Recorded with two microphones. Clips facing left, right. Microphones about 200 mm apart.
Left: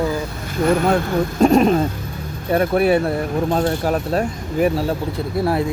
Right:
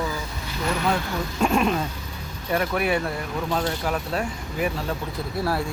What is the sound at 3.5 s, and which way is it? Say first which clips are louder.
Speech: left 5 dB; 50° left (ahead or behind).